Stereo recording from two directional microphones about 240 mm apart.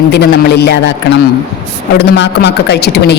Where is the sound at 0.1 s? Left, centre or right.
Left.